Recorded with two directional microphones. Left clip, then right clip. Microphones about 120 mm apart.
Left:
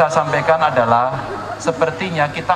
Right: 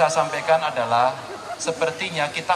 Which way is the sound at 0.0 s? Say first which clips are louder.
Left 5 dB; 25° right (ahead or behind).